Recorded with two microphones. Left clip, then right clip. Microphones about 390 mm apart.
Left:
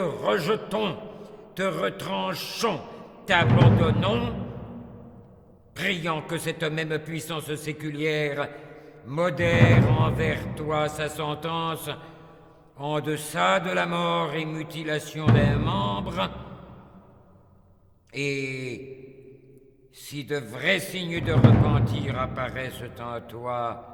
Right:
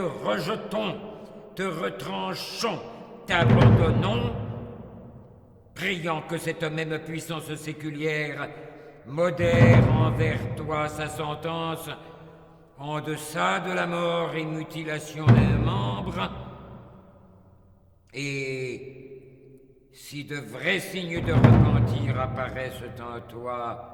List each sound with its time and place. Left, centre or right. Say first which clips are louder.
0.0 s speech: left 3 dB; left
5.7 s speech: left 1 dB; left
18.1 s speech: left 2 dB; left
20.1 s speech: left 5 dB; left